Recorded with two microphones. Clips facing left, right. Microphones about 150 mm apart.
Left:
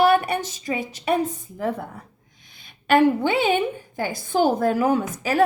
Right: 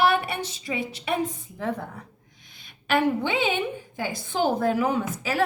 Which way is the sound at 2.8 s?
45° left (ahead or behind).